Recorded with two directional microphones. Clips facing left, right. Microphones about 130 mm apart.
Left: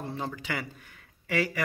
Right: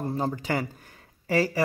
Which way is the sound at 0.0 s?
40° right (ahead or behind).